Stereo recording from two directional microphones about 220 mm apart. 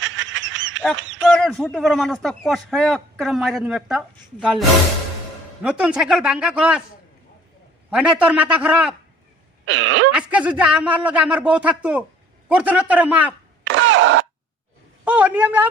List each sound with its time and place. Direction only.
0.0 s goose: 60° right (ahead or behind)
1.2 s a man's voice: 5° left (ahead or behind)
5.6 s a man's voice: 5° right (ahead or behind)
7.9 s a man's voice: 5° right (ahead or behind)
9.6 s speech: 60° right (ahead or behind)
10.1 s a man's voice: 5° right (ahead or behind)
13.7 s a sound: 60° right (ahead or behind)
15.0 s a man's voice: 5° right (ahead or behind)